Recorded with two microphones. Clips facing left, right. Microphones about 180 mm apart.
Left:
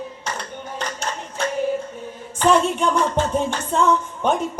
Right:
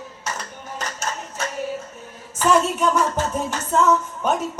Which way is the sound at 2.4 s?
30° left (ahead or behind).